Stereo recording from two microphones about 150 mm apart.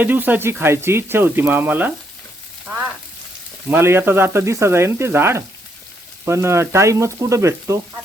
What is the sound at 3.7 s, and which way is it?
Speech, 15° right (ahead or behind).